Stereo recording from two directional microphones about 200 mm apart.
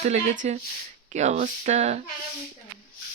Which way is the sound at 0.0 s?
35° right (ahead or behind).